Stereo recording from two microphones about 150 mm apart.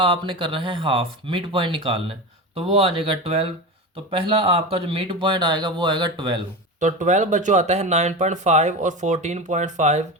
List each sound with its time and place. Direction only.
0.0 s speech: 35° right (ahead or behind)
6.7 s speech: 55° right (ahead or behind)